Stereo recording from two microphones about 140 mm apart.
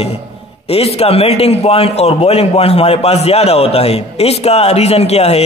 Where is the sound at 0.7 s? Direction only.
45° left (ahead or behind).